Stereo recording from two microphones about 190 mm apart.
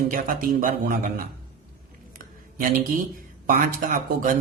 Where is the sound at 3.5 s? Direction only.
45° right (ahead or behind).